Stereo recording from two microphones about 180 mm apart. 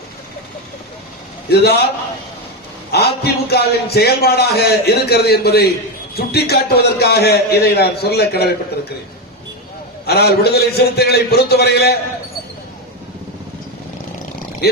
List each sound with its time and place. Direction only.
1.5 s a man's voice: 60° left (ahead or behind)
2.9 s a man's voice: 60° left (ahead or behind)
10.1 s a man's voice: 60° left (ahead or behind)